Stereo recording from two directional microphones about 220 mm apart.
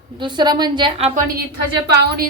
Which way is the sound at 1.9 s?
45° right (ahead or behind).